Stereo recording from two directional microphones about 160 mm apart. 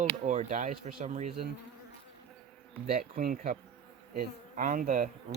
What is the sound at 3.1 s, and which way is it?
Speech, 60° right (ahead or behind).